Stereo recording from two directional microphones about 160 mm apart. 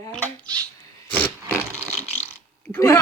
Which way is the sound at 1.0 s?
10° left (ahead or behind).